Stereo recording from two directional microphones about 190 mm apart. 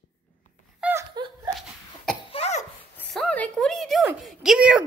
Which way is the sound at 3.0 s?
5° left (ahead or behind).